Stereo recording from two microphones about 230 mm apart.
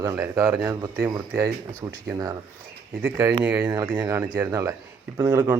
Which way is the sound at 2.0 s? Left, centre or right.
Centre.